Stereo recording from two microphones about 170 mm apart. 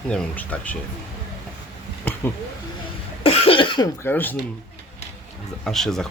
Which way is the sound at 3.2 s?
35° left (ahead or behind).